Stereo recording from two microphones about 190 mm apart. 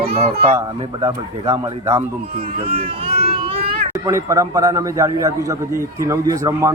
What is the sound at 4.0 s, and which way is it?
A man's voice, 15° right (ahead or behind).